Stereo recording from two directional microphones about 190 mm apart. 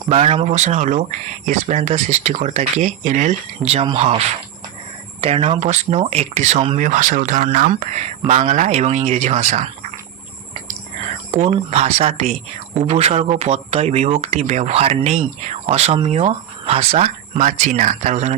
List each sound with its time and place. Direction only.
0.1 s speech: 35° right (ahead or behind)
5.2 s speech: 30° right (ahead or behind)
11.3 s speech: 35° right (ahead or behind)